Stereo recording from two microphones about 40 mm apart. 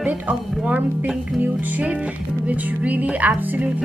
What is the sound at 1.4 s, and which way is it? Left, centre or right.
Speech, right.